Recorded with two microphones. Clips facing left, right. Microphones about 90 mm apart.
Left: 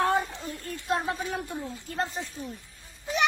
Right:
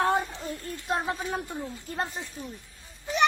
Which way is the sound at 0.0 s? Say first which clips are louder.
Even; 20° right (ahead or behind).